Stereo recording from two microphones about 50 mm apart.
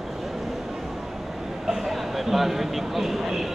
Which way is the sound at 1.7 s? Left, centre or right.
Centre.